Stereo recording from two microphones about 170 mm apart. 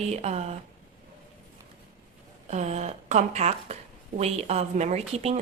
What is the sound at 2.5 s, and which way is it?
A woman's voice, 40° right (ahead or behind).